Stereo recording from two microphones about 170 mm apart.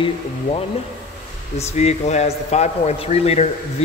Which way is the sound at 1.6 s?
40° left (ahead or behind).